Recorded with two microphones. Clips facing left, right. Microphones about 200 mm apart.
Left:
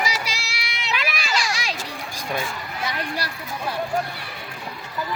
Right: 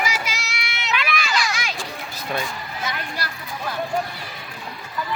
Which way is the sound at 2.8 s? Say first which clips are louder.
Left 2 dB; 30° left (ahead or behind).